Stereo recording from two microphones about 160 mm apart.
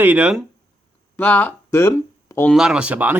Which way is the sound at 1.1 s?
10° left (ahead or behind).